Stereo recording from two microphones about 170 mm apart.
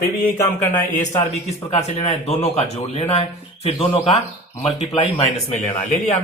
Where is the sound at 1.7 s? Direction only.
40° left (ahead or behind).